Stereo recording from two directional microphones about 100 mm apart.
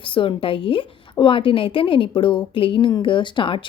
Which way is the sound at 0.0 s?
60° left (ahead or behind).